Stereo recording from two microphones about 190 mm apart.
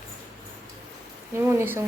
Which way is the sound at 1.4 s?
10° right (ahead or behind).